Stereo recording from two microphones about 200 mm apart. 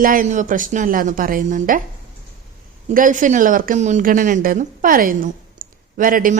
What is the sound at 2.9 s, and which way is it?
A woman's voice, 40° right (ahead or behind).